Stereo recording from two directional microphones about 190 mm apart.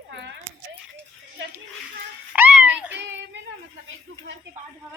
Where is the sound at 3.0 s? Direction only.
70° right (ahead or behind).